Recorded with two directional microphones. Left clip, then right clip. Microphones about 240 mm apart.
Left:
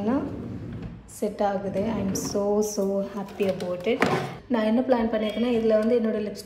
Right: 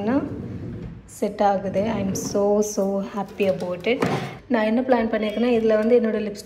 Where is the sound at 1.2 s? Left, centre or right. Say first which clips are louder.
Right 5 dB; centre.